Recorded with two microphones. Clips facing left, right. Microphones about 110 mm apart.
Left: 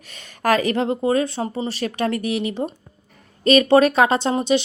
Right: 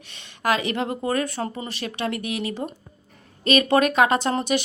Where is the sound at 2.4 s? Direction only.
25° left (ahead or behind).